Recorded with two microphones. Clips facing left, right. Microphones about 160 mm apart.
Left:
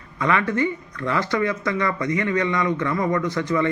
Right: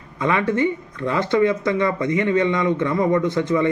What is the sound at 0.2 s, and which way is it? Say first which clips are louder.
A man's voice: right 2 dB; 20° right (ahead or behind).